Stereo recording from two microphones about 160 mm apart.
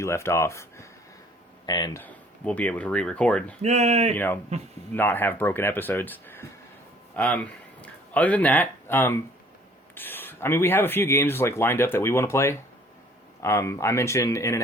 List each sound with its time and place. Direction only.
0.0 s speech: 15° left (ahead or behind)
2.0 s speech: 10° left (ahead or behind)
3.6 s speech: 45° right (ahead or behind)
4.1 s speech: 15° left (ahead or behind)